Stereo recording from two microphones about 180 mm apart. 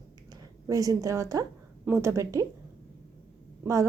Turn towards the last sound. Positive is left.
turn(degrees=-15)  # may be behind; listen again after turning